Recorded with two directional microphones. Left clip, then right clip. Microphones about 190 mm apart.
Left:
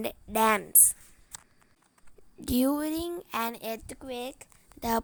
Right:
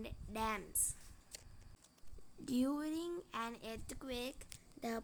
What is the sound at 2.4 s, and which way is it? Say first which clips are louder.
A woman's voice: left 11 dB; 45° left (ahead or behind).